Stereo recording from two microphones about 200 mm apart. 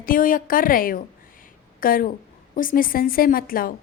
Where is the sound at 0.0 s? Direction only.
45° left (ahead or behind).